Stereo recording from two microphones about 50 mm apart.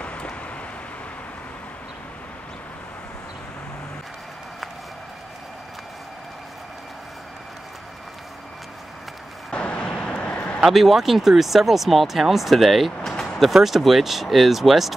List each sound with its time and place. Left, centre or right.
0.0 s vehicle: left
9.5 s vehicle: centre
10.6 s speech: centre